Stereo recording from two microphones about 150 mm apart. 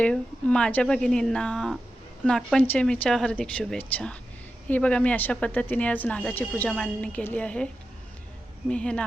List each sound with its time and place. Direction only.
0.0 s speech: 5° left (ahead or behind)
8.7 s speech: 5° left (ahead or behind)